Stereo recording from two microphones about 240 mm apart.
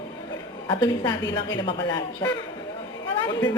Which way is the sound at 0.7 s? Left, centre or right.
Centre.